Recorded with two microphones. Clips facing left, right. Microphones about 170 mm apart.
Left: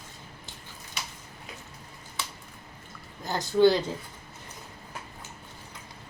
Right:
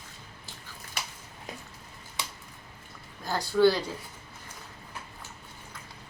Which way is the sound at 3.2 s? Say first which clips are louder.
Left 2 dB; 20° left (ahead or behind).